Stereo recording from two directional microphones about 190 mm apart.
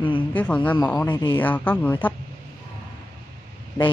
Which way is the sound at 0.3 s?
10° left (ahead or behind).